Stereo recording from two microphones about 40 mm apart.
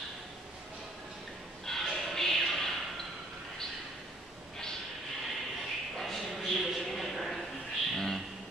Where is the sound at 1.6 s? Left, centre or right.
Centre.